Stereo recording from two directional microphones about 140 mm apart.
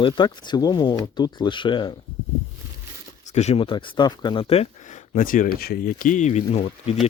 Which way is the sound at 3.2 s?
50° left (ahead or behind).